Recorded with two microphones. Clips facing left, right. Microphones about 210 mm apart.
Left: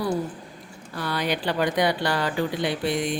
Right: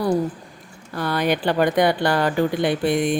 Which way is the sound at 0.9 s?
50° right (ahead or behind).